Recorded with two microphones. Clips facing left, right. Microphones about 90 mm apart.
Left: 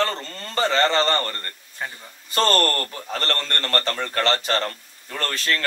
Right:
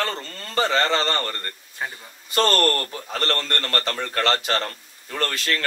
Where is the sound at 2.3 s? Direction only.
35° left (ahead or behind).